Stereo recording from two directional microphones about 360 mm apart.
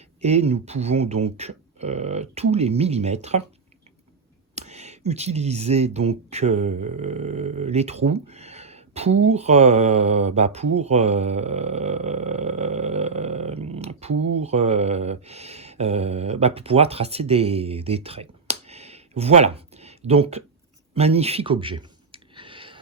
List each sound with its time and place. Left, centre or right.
0.2 s speech: centre
4.5 s speech: centre
20.9 s a sound: centre